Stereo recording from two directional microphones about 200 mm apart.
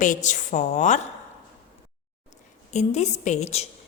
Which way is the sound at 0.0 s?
40° left (ahead or behind).